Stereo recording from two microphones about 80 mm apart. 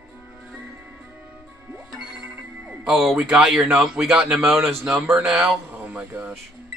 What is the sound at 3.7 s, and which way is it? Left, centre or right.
Speech, centre.